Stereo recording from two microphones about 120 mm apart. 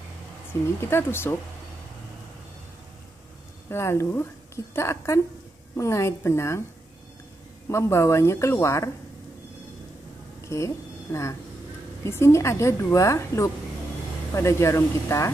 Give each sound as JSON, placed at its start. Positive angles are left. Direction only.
{"t": 0.5, "sound": "a woman's voice", "side_deg": 20}
{"t": 3.7, "sound": "a woman's voice", "side_deg": 20}
{"t": 7.7, "sound": "a woman's voice", "side_deg": 25}
{"t": 10.4, "sound": "a woman's voice", "side_deg": 25}